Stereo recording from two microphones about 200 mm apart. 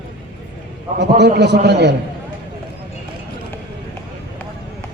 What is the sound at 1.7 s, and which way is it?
Speech, 60° right (ahead or behind).